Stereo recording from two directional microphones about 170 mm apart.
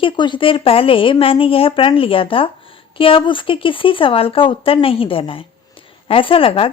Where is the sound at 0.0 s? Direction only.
30° left (ahead or behind).